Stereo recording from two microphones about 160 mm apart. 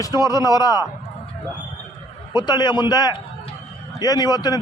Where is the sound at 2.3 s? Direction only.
25° left (ahead or behind).